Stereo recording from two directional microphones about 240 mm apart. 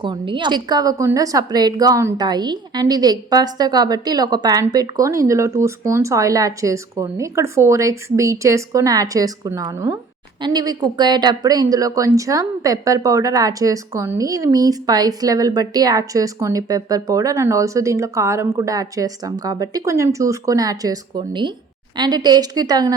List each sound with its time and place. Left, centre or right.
0.0 s a woman's voice: centre